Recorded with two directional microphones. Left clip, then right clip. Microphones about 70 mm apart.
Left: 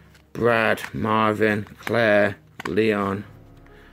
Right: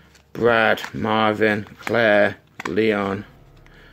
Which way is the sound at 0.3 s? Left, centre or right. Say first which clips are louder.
Right 3 dB; left.